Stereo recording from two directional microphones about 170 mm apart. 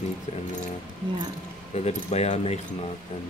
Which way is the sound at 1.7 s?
40° left (ahead or behind).